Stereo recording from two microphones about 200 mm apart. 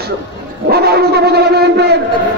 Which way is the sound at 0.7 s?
50° right (ahead or behind).